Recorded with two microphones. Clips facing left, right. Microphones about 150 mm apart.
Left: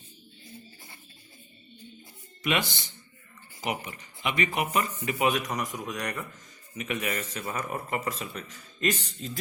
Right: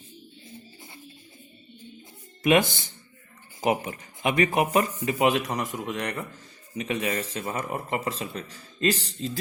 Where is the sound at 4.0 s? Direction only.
45° right (ahead or behind); by 9.3 s 30° right (ahead or behind).